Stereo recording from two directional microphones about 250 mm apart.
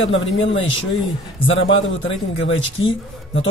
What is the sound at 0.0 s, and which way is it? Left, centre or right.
Speech, left.